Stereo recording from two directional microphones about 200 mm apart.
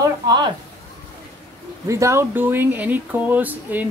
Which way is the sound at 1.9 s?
15° right (ahead or behind).